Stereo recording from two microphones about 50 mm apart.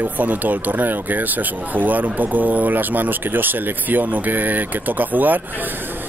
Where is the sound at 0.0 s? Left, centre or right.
Right.